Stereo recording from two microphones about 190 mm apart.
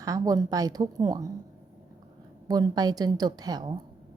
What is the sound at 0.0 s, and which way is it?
A woman's voice, 20° right (ahead or behind).